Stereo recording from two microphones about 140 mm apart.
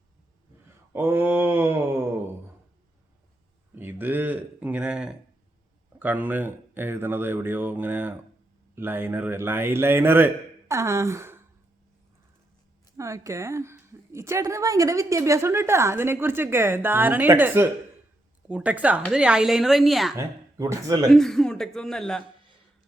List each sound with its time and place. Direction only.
0.9 s a man's voice: 15° right (ahead or behind)
3.8 s a man's voice: 15° right (ahead or behind)
13.0 s a woman's voice: 20° right (ahead or behind); by 20.1 s centre (ahead or behind)
20.1 s speech: 20° right (ahead or behind)
21.1 s a man's voice: 5° left (ahead or behind)